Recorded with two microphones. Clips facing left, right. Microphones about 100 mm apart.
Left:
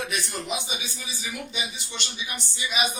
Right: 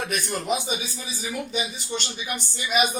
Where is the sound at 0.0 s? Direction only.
50° right (ahead or behind).